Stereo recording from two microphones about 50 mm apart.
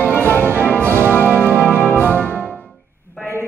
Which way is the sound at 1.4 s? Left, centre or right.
Right.